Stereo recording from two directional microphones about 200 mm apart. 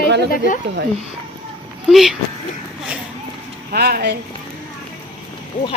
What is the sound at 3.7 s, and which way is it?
Speech, 50° right (ahead or behind).